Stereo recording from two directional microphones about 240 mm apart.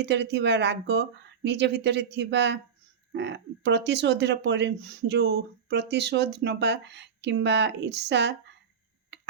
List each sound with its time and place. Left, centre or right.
0.0 s speech: right